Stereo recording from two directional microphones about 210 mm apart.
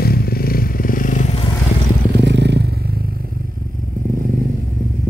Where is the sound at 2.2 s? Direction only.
55° right (ahead or behind).